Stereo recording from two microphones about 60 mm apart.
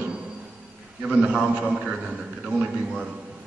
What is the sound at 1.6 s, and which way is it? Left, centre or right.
A man's voice, centre.